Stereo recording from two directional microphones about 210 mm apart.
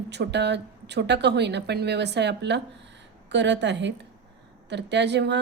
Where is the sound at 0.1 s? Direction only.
55° right (ahead or behind).